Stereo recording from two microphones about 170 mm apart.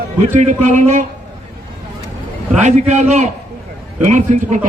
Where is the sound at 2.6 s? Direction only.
45° right (ahead or behind).